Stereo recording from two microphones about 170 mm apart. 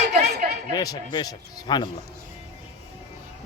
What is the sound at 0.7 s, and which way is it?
A man's voice, 25° left (ahead or behind).